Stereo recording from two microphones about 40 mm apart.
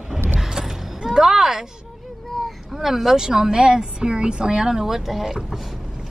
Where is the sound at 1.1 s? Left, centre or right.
Centre.